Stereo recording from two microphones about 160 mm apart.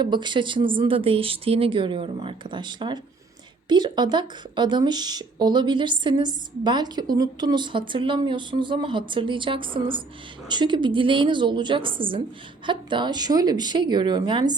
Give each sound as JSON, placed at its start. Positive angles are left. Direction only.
{"t": 0.0, "sound": "speech", "side_deg": -30}